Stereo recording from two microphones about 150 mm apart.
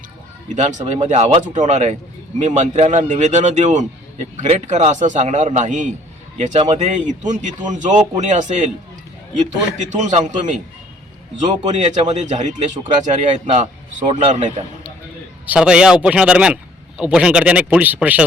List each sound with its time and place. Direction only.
0.4 s a man's voice: 55° right (ahead or behind)
9.7 s a man's voice: 55° right (ahead or behind)
14.1 s a man's voice: 40° right (ahead or behind)
15.4 s speech: 5° right (ahead or behind)